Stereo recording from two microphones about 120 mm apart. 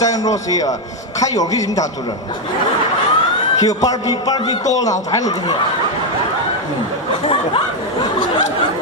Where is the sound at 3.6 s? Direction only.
30° left (ahead or behind).